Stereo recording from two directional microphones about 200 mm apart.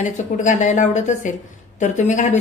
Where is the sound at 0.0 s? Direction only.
40° left (ahead or behind).